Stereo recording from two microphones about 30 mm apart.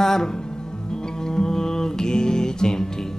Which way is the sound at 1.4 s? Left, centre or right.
Centre.